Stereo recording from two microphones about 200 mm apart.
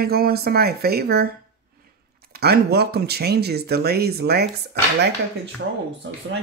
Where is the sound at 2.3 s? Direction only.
50° right (ahead or behind).